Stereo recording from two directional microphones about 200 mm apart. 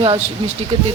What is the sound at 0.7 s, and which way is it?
Speech, 30° right (ahead or behind).